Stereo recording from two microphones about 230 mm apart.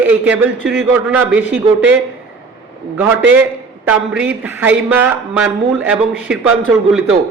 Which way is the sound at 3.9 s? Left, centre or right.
Centre.